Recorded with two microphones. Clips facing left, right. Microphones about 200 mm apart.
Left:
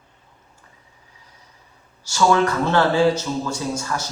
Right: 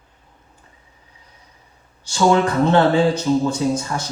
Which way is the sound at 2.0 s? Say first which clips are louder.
Right 2 dB; 20° right (ahead or behind).